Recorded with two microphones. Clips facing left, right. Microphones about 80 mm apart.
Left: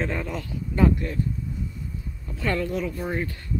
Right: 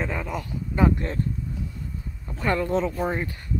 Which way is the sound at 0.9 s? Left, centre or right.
Right.